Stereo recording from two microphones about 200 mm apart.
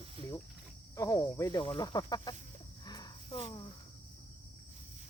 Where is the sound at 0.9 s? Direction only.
15° left (ahead or behind).